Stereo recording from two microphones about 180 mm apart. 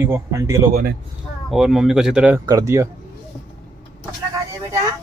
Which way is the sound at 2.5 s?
20° right (ahead or behind).